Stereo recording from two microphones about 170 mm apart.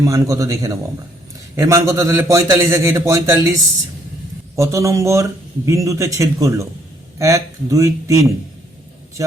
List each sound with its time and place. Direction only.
0.0 s a man's voice: 20° right (ahead or behind)